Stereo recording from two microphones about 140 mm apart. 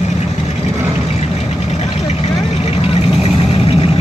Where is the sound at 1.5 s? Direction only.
50° left (ahead or behind).